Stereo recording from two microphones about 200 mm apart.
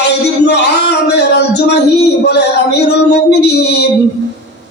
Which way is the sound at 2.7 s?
55° left (ahead or behind).